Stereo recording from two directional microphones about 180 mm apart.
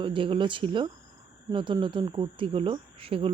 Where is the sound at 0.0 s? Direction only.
30° right (ahead or behind).